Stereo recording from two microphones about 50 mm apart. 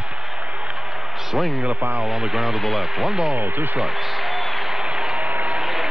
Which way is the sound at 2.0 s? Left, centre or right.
Centre.